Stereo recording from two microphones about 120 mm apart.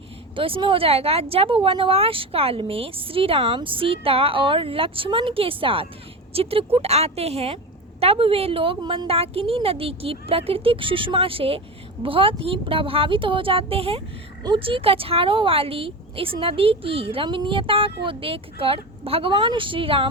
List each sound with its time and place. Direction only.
0.3 s a woman's voice: 45° right (ahead or behind)
9.0 s a woman's voice: 55° right (ahead or behind)